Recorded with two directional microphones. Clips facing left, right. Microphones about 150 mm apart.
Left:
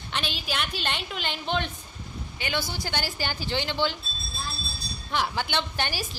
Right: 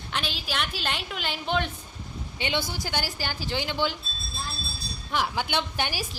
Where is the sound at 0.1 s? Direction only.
Centre (ahead or behind).